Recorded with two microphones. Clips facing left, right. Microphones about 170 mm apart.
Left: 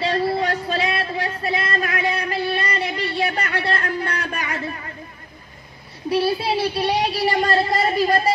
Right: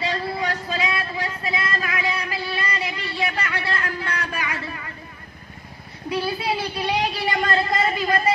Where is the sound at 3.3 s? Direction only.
50° left (ahead or behind).